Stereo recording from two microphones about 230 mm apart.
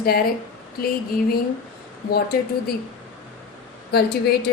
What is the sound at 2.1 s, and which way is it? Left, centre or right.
Speech, left.